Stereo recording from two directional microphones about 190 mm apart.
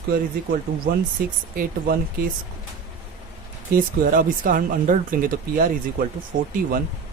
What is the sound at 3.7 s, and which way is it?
Speech, 45° right (ahead or behind).